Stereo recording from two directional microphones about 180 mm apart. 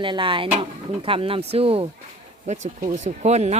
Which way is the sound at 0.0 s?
30° right (ahead or behind).